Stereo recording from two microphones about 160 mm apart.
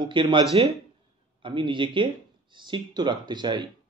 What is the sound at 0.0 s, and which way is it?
A man's voice, 30° right (ahead or behind).